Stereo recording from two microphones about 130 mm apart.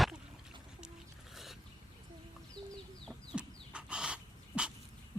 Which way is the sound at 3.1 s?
10° right (ahead or behind).